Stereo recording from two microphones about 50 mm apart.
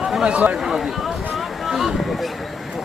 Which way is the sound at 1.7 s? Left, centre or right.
Centre.